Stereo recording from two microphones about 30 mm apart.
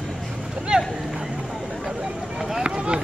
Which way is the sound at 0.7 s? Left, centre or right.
Right.